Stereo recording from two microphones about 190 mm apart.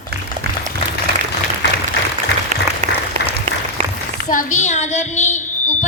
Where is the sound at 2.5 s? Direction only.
40° right (ahead or behind).